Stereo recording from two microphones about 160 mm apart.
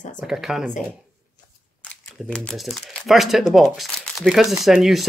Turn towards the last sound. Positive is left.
turn(degrees=0)  # may be behind; listen again after turning